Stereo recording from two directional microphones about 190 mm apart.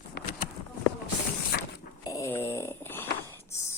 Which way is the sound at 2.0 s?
20° left (ahead or behind).